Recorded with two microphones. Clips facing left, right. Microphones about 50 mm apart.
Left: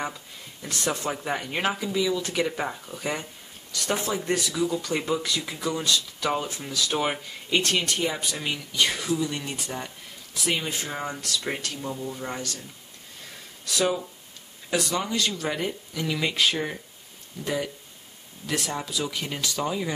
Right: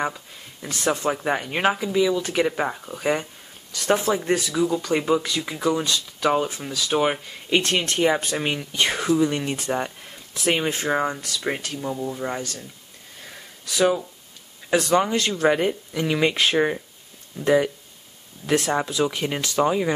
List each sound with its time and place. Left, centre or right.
0.1 s speech: centre
7.8 s speech: right
11.3 s speech: centre
13.7 s speech: centre
14.8 s speech: right
18.5 s speech: right
18.9 s speech: right